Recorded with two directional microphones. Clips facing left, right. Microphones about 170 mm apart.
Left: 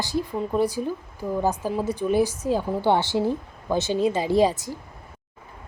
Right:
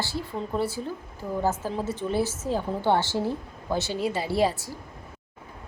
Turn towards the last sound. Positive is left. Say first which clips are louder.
# left 4 dB
turn(degrees=15)  # may be behind; listen again after turning